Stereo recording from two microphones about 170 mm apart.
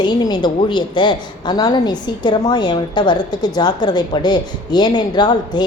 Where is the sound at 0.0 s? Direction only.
25° left (ahead or behind).